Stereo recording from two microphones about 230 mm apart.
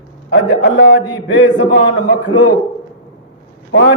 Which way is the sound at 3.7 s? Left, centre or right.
Left.